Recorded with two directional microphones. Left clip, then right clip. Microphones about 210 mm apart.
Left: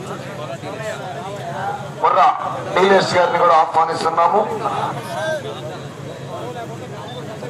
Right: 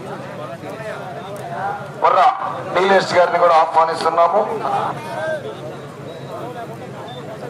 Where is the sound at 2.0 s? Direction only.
20° right (ahead or behind).